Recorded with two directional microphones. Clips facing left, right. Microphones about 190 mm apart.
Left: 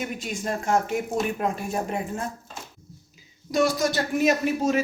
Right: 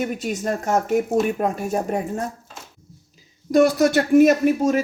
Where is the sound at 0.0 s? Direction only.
45° right (ahead or behind).